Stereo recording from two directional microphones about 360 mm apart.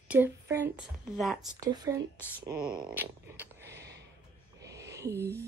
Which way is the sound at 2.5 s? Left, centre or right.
Right.